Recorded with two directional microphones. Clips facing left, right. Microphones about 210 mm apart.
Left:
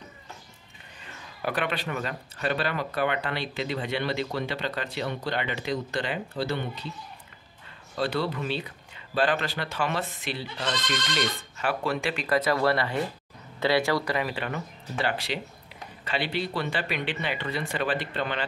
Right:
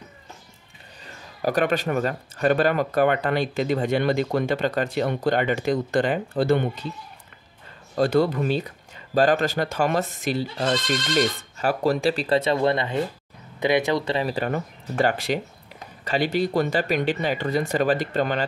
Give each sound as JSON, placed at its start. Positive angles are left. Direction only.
{"t": 1.0, "sound": "a man's voice", "side_deg": -40}
{"t": 7.9, "sound": "a man's voice", "side_deg": -45}